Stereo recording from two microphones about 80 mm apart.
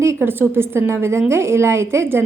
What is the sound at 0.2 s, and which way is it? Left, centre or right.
A woman's voice, right.